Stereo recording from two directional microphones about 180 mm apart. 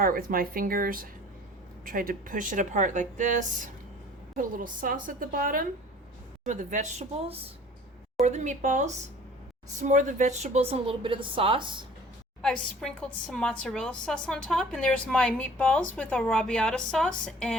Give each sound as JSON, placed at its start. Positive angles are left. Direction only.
{"t": 0.0, "sound": "a woman's voice", "side_deg": -50}
{"t": 12.4, "sound": "a woman's voice", "side_deg": 5}